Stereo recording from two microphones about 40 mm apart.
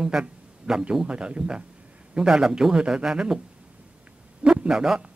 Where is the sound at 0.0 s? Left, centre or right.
Centre.